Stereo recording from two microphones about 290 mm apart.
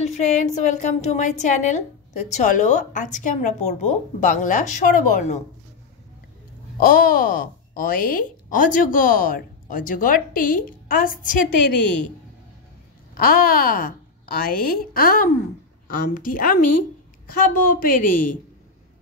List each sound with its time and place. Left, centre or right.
0.0 s speech: left
6.8 s speech: left
11.6 s a woman's voice: left
13.2 s a woman's voice: left